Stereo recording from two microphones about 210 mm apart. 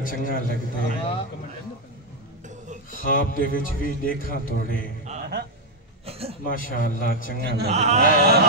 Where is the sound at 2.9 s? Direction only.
40° left (ahead or behind).